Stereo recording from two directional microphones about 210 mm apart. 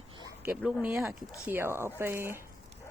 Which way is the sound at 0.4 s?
5° right (ahead or behind).